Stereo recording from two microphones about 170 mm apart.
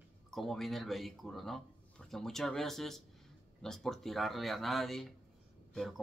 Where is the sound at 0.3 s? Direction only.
Centre (ahead or behind).